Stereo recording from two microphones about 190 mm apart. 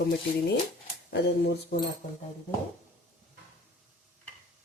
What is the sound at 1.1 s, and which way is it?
Speech, 60° left (ahead or behind).